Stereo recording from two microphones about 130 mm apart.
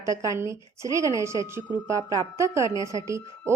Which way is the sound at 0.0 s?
25° right (ahead or behind).